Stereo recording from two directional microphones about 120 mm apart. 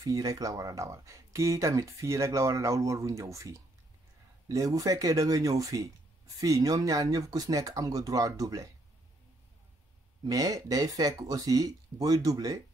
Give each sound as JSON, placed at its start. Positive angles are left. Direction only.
{"t": 0.0, "sound": "speech", "side_deg": -30}
{"t": 10.2, "sound": "speech", "side_deg": -30}